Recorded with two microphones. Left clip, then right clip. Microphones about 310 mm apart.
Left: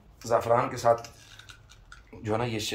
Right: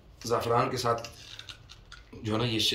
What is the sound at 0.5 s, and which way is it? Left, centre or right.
Speech, centre.